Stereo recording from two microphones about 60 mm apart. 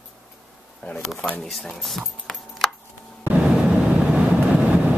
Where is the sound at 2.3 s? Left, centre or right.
Centre.